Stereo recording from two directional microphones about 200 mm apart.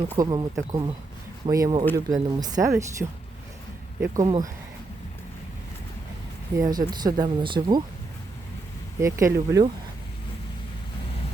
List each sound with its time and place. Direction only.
0.2 s speech: 20° right (ahead or behind)
6.6 s speech: 20° right (ahead or behind)
9.0 s speech: 15° right (ahead or behind)